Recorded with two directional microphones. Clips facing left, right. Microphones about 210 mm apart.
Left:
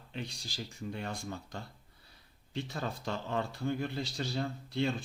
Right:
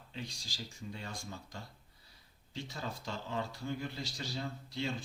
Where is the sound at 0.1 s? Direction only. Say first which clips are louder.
Left 4 dB; 60° left (ahead or behind).